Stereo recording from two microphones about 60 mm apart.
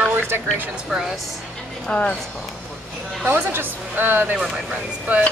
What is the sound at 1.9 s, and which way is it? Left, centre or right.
Speech, centre.